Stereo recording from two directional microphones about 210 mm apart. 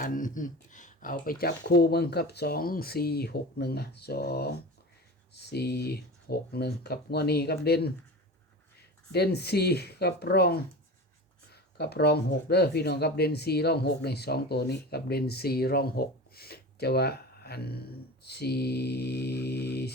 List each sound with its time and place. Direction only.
0.0 s speech: 40° left (ahead or behind)
9.1 s speech: 50° left (ahead or behind)
11.8 s speech: 50° left (ahead or behind)